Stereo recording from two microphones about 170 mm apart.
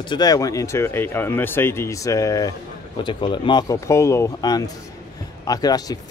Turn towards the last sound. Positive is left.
turn(degrees=20)  # may be behind; listen again after turning